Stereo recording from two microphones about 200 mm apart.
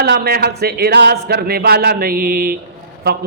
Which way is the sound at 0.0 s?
50° right (ahead or behind).